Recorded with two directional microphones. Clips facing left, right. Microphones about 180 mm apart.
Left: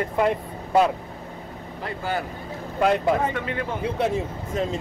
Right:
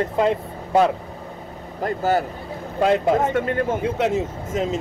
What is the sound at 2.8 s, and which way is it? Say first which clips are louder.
Speech: right 2 dB; 25° right (ahead or behind).